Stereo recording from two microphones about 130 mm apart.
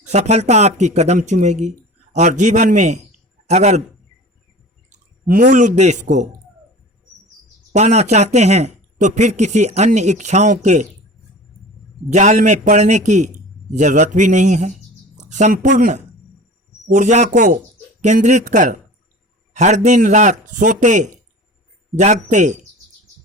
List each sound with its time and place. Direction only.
0.1 s speech: 60° right (ahead or behind); by 3.0 s 75° right (ahead or behind)
3.4 s a man's voice: 55° right (ahead or behind)
4.9 s speech: 90° right; by 6.2 s 70° right (ahead or behind)
7.7 s speech: 60° right (ahead or behind)
12.1 s a man's voice: 65° right (ahead or behind); by 17.6 s 85° right
18.0 s a man's voice: 65° right (ahead or behind)